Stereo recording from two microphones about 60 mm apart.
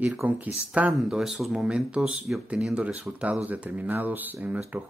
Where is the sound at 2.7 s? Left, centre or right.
Right.